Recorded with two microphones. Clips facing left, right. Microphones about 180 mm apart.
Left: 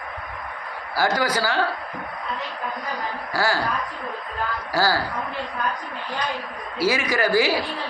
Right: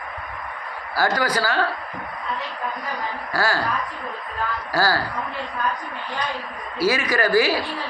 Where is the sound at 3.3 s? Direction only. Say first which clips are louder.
Even; 15° left (ahead or behind).